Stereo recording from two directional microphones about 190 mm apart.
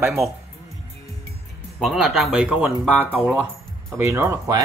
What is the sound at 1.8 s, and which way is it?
Speech, centre (ahead or behind).